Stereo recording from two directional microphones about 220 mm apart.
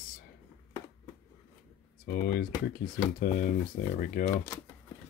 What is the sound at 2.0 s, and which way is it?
Speech, 40° left (ahead or behind).